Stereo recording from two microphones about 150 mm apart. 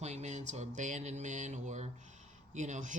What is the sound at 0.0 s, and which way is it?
Speech, 50° right (ahead or behind).